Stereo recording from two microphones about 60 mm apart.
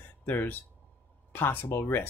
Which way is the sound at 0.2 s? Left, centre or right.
Left.